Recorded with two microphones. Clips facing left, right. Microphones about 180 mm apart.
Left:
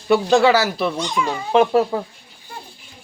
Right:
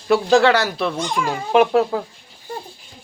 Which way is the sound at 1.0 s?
50° right (ahead or behind).